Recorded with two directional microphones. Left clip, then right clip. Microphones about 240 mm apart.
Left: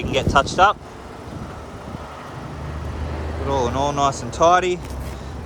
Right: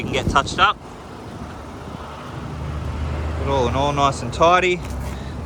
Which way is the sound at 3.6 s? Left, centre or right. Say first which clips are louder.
Right 1 dB; centre.